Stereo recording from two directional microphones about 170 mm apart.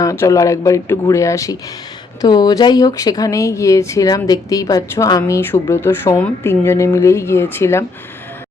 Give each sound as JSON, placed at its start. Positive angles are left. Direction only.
{"t": 0.0, "sound": "speech", "side_deg": 20}